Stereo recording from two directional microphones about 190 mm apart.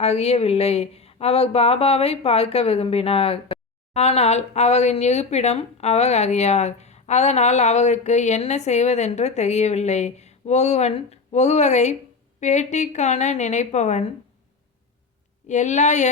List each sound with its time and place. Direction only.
0.0 s speech: 35° left (ahead or behind)
15.4 s speech: 40° left (ahead or behind)